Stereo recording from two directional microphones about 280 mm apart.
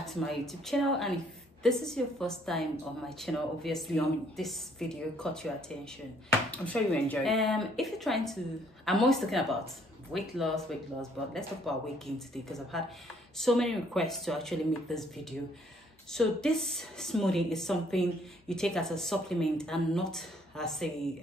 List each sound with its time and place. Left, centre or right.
0.0 s a woman's voice: centre
6.5 s a woman's voice: centre
12.7 s a woman's voice: centre